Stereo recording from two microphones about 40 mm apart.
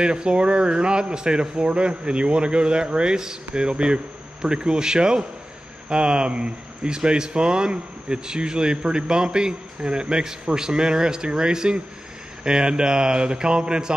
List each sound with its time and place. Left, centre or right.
0.0 s speech: right